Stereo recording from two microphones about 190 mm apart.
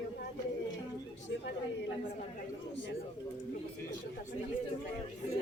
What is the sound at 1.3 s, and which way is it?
Chatter, 70° left (ahead or behind).